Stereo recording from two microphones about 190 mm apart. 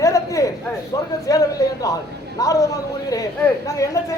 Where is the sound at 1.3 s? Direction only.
15° left (ahead or behind).